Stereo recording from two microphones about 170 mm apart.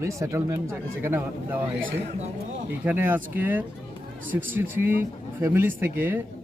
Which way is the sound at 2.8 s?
10° right (ahead or behind).